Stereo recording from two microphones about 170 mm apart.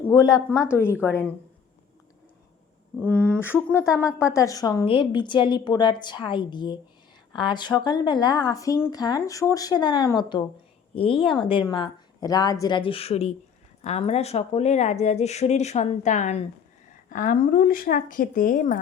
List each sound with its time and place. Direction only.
0.1 s speech: 25° left (ahead or behind)
3.0 s speech: 10° left (ahead or behind); by 18.8 s 50° left (ahead or behind)